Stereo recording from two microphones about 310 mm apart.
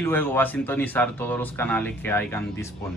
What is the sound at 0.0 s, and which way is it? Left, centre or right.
Speech, centre.